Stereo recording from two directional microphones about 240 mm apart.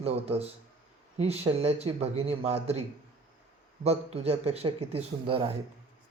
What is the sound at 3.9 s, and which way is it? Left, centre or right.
A man's voice, right.